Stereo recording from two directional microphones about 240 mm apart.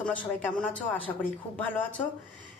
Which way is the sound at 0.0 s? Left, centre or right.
Centre.